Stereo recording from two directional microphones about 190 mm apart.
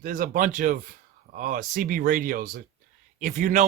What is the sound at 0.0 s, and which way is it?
A man's voice, 45° right (ahead or behind).